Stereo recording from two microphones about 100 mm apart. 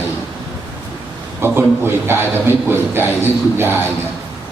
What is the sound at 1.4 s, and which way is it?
A man's voice, 20° right (ahead or behind).